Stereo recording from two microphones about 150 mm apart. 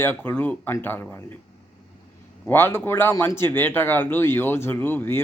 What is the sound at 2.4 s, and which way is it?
A man's voice, 15° left (ahead or behind).